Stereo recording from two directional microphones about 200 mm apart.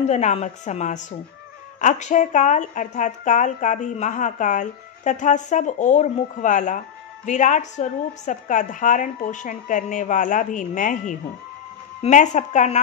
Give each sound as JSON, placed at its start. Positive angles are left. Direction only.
{"t": 0.1, "sound": "speech", "side_deg": 35}